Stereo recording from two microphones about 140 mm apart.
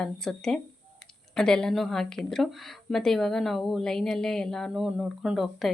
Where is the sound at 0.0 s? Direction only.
5° left (ahead or behind).